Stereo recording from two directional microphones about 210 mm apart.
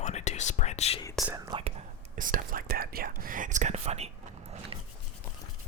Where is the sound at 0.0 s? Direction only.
35° left (ahead or behind).